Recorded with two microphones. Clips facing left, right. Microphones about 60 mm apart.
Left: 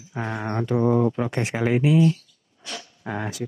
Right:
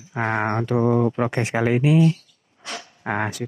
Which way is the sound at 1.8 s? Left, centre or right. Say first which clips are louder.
Right 1 dB; right.